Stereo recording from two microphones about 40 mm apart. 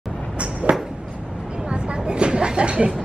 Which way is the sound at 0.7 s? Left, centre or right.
Right.